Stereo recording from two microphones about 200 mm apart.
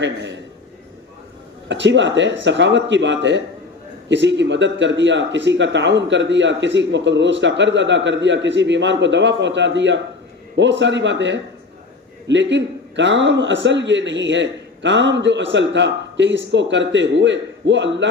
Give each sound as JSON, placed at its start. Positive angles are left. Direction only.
{"t": 0.0, "sound": "speech", "side_deg": -65}
{"t": 1.6, "sound": "speech", "side_deg": -65}